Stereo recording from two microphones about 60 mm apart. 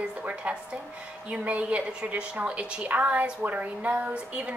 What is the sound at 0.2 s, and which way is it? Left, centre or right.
A woman's voice, right.